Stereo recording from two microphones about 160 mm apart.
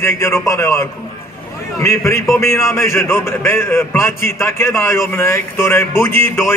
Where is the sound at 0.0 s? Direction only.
15° left (ahead or behind).